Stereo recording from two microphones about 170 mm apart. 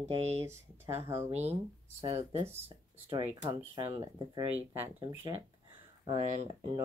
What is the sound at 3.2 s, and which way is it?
Speech, 20° right (ahead or behind).